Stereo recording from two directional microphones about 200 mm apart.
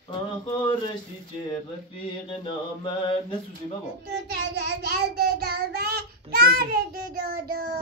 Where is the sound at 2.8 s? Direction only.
25° left (ahead or behind).